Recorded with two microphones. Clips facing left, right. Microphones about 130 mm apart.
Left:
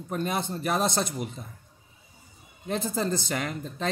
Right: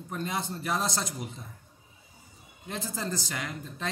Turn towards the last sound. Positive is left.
turn(degrees=65)  # may be behind; listen again after turning